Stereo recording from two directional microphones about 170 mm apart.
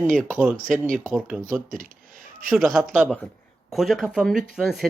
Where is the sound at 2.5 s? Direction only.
Centre (ahead or behind).